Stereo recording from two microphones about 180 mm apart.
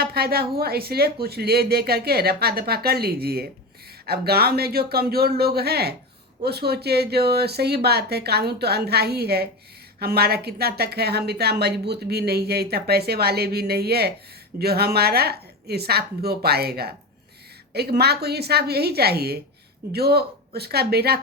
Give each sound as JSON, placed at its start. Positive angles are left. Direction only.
{"t": 0.0, "sound": "a woman's voice", "side_deg": -60}